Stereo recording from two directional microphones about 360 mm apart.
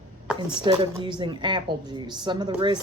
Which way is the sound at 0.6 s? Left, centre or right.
Centre.